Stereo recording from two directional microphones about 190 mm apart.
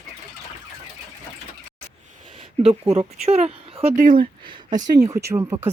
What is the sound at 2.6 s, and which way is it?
Speech, 25° right (ahead or behind).